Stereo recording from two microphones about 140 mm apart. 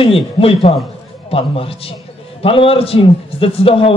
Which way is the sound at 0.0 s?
40° left (ahead or behind).